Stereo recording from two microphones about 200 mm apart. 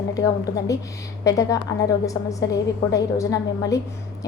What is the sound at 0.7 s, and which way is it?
A woman's voice, 15° left (ahead or behind).